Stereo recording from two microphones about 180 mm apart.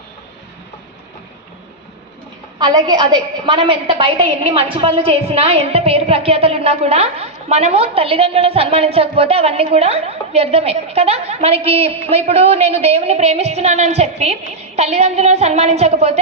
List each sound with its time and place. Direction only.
2.6 s a woman's voice: 25° right (ahead or behind)